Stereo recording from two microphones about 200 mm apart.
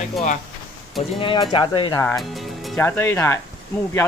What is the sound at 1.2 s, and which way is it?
Speech, 25° left (ahead or behind).